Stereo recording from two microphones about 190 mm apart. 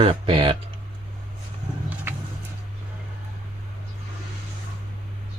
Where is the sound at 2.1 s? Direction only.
10° right (ahead or behind).